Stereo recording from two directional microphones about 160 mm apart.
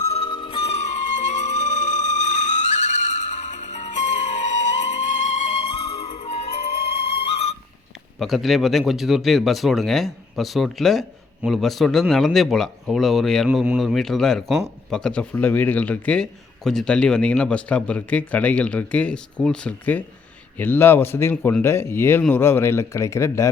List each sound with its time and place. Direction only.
0.1 s music: 35° left (ahead or behind)
8.2 s a man's voice: centre (ahead or behind); by 23.5 s 20° left (ahead or behind)